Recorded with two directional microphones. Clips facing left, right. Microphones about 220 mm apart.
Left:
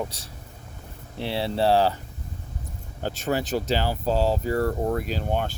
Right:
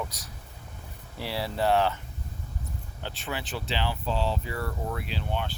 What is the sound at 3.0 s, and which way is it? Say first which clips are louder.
Speech: left 10 dB; 45° left (ahead or behind).